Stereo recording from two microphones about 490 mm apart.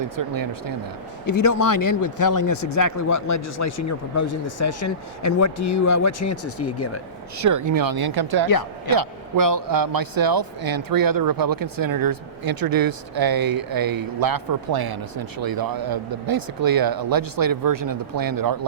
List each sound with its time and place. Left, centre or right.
0.0 s speech: right
1.3 s speech: left
7.3 s a man's voice: right